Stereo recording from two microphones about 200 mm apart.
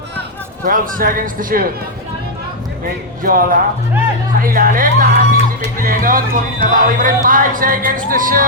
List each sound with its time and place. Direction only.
0.6 s speech: 45° right (ahead or behind)
3.2 s speech: 45° right (ahead or behind)